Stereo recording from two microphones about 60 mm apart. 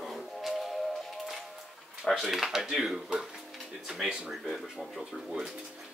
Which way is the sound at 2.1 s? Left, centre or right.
Centre.